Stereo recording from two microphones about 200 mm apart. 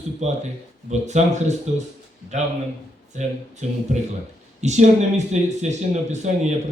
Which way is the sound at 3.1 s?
35° right (ahead or behind).